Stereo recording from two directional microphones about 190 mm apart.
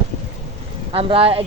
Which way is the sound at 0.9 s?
30° right (ahead or behind).